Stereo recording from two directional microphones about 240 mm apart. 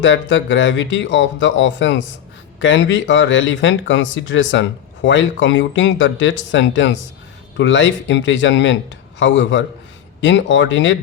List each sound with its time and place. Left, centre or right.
0.0 s speech: left